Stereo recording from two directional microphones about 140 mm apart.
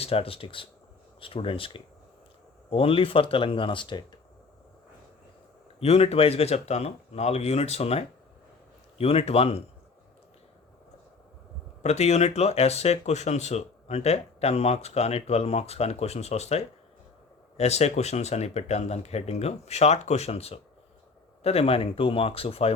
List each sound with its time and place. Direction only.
0.0 s speech: 45° left (ahead or behind)
5.8 s speech: 45° left (ahead or behind)
11.8 s speech: 50° left (ahead or behind)